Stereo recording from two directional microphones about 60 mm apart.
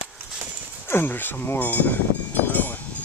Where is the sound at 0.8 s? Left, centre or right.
Left.